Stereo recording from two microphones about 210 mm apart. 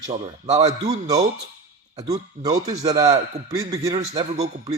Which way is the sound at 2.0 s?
15° right (ahead or behind).